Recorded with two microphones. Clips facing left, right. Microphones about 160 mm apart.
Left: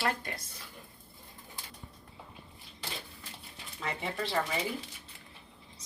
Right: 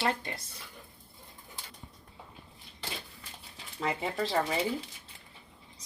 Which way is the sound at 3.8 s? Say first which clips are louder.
Right 4 dB; 35° right (ahead or behind).